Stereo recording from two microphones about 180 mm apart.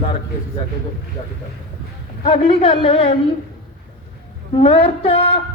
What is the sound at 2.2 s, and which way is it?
Speech, 30° left (ahead or behind).